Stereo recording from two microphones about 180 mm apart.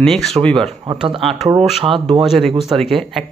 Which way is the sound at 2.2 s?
Centre (ahead or behind).